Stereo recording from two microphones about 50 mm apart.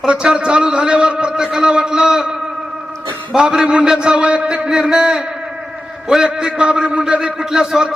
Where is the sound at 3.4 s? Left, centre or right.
Centre.